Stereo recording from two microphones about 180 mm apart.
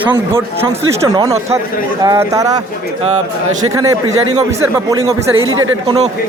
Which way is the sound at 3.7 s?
20° right (ahead or behind).